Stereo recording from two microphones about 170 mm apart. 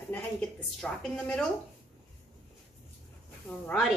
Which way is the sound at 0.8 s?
5° left (ahead or behind).